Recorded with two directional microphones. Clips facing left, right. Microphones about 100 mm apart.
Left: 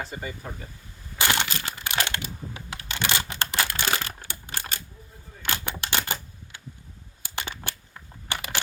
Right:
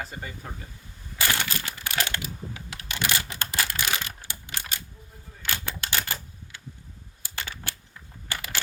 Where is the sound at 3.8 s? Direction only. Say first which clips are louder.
Left 2 dB; 40° left (ahead or behind).